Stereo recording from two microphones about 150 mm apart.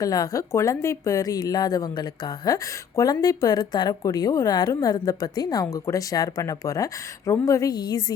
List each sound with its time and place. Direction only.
0.0 s speech: 25° left (ahead or behind)